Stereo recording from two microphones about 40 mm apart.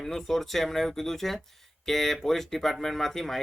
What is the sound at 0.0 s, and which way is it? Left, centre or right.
Speech, centre.